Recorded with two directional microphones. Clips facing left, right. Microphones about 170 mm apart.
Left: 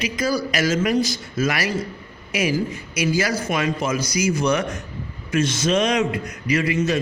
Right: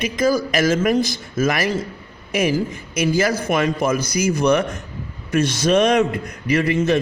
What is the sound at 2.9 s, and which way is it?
A man's voice, 50° right (ahead or behind).